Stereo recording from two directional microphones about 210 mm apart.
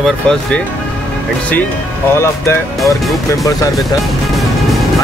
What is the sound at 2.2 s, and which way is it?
Speech, 15° left (ahead or behind).